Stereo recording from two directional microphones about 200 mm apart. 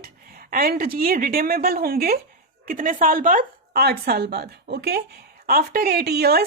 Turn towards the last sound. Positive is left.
turn(degrees=-50)  # may be behind; listen again after turning